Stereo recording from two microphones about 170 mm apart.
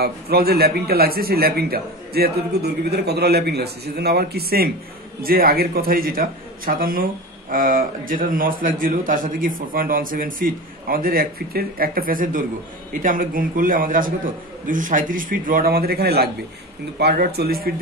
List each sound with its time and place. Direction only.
0.0 s a man's voice: 65° right (ahead or behind)